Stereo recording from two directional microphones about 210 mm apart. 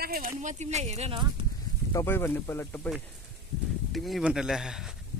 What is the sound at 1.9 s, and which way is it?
Speech, 15° left (ahead or behind).